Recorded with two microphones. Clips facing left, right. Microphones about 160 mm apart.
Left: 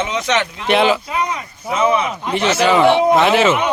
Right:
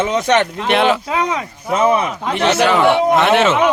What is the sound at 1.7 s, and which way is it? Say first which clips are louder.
Speech: right 2 dB; 45° right (ahead or behind).